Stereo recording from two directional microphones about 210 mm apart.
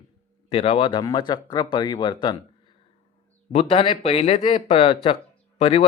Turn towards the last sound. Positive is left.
turn(degrees=30)  # may be behind; listen again after turning